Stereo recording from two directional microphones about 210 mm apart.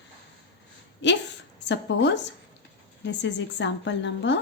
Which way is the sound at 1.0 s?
60° left (ahead or behind).